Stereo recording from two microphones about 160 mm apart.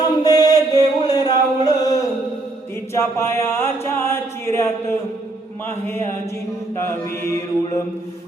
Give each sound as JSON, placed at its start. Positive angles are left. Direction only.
{"t": 0.0, "sound": "chant", "side_deg": 25}
{"t": 2.9, "sound": "mantra", "side_deg": 15}